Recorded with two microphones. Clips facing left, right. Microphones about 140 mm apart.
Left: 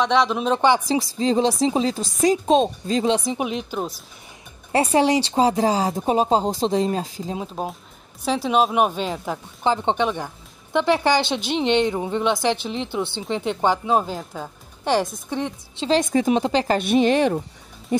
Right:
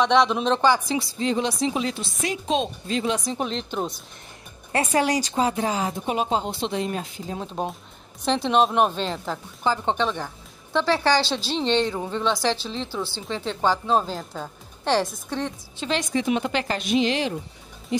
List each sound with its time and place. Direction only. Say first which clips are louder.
0.0 s speech: even; centre (ahead or behind)
0.6 s speech: left 3 dB; 20° left (ahead or behind)
0.8 s speech: left 4 dB; 35° left (ahead or behind)
3.3 s speech: left 3 dB; 10° left (ahead or behind)
4.7 s speech: left 4 dB; 25° left (ahead or behind)
7.6 s speech: even; centre (ahead or behind)
9.6 s speech: left 3 dB; 20° left (ahead or behind)
16.2 s speech: left 5 dB; 35° left (ahead or behind)
16.7 s a woman's voice: left 5 dB; 50° left (ahead or behind)